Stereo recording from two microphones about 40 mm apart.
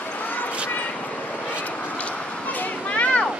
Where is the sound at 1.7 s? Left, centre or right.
Left.